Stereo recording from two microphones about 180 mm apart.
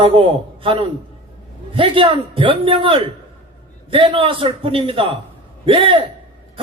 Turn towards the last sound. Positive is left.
turn(degrees=-30)  # may be behind; listen again after turning